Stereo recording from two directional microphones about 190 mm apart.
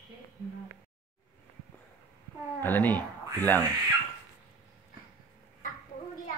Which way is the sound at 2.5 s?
10° left (ahead or behind).